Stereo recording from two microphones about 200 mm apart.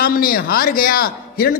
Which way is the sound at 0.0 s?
45° left (ahead or behind).